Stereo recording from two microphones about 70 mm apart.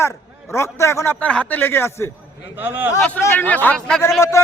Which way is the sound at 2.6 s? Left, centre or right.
Right.